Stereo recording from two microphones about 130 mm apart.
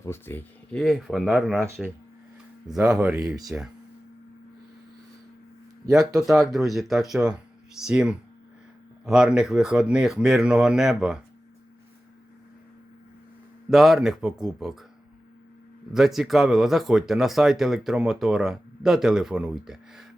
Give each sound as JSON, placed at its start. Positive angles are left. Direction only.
{"t": 0.0, "sound": "speech", "side_deg": 20}
{"t": 0.7, "sound": "speech", "side_deg": 0}
{"t": 1.5, "sound": "speech", "side_deg": -20}
{"t": 2.9, "sound": "speech", "side_deg": -5}
{"t": 6.2, "sound": "speech", "side_deg": 0}
{"t": 13.7, "sound": "speech", "side_deg": 0}
{"t": 15.9, "sound": "speech", "side_deg": -5}